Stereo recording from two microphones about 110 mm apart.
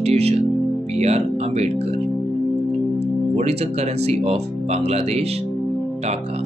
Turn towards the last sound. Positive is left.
turn(degrees=-70)  # may be behind; listen again after turning